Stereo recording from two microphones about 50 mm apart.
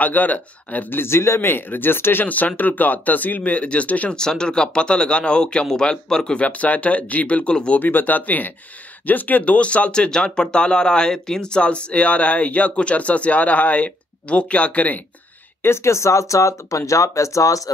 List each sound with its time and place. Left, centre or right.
0.0 s speech: left
0.9 s speech: left
2.2 s speech: left
4.1 s speech: centre
6.4 s speech: left
7.8 s speech: left
15.6 s speech: left